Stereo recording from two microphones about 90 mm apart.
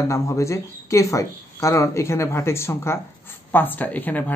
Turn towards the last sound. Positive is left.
turn(degrees=20)  # may be behind; listen again after turning